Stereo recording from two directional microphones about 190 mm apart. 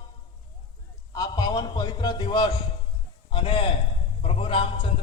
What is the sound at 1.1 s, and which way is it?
A man's voice, 20° left (ahead or behind).